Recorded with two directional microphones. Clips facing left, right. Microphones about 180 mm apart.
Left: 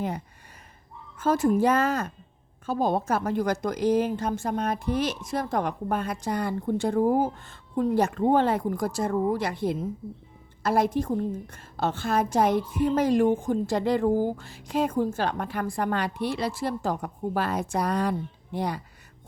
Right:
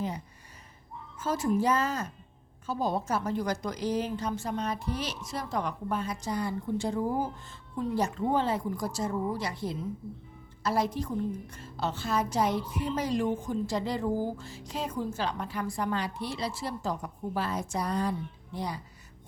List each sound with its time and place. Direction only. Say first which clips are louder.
1.1 s a woman's voice: left 6 dB; 55° left (ahead or behind)